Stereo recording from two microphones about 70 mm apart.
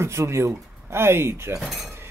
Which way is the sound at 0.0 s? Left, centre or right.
Right.